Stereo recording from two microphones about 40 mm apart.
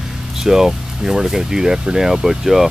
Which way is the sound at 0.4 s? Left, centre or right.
Centre.